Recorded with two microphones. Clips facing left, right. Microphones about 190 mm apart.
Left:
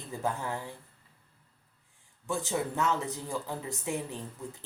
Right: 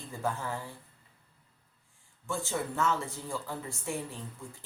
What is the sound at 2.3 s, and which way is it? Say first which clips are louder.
Speech: left 2 dB; 20° left (ahead or behind).